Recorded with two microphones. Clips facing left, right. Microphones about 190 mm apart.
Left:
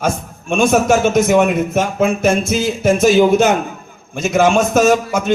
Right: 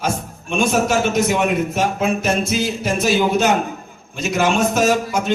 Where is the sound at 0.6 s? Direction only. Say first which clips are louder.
Left 5 dB; 50° left (ahead or behind).